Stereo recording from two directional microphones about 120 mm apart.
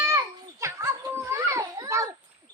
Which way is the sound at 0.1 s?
25° right (ahead or behind).